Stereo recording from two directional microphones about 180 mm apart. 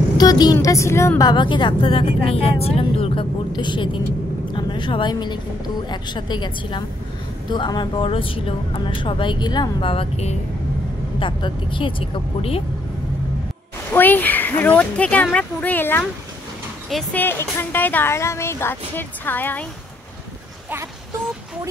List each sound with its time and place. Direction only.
0.2 s speech: 20° left (ahead or behind)
13.9 s a woman's voice: 10° left (ahead or behind)